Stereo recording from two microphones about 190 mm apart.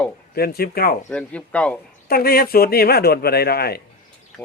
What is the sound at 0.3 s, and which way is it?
Speech, 55° left (ahead or behind).